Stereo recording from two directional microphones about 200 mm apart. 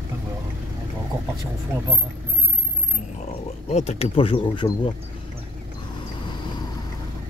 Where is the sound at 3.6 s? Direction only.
35° left (ahead or behind).